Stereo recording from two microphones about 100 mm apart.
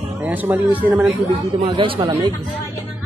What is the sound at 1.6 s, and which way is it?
Speech, 55° right (ahead or behind).